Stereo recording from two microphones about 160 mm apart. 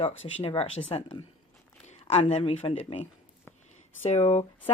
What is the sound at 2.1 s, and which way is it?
Speech, 40° left (ahead or behind).